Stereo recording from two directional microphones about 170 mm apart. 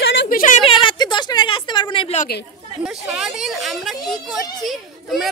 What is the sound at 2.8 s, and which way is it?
A child's voice, 5° right (ahead or behind).